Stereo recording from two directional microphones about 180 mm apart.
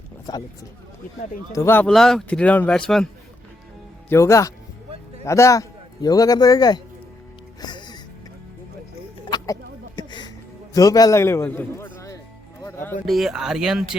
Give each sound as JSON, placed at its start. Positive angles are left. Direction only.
{"t": 0.3, "sound": "speech", "side_deg": 20}
{"t": 1.5, "sound": "speech", "side_deg": 15}
{"t": 1.9, "sound": "speech", "side_deg": 0}
{"t": 4.1, "sound": "a man's voice", "side_deg": 15}
{"t": 7.6, "sound": "music", "side_deg": 25}
{"t": 9.3, "sound": "a sound", "side_deg": 25}
{"t": 10.8, "sound": "a man's voice", "side_deg": 20}
{"t": 12.6, "sound": "music", "side_deg": 10}
{"t": 13.1, "sound": "speech", "side_deg": 0}